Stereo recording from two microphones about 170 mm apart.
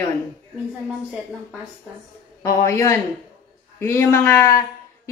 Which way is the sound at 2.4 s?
15° left (ahead or behind).